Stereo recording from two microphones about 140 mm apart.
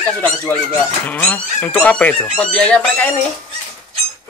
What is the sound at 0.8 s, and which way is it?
Speech, 10° left (ahead or behind).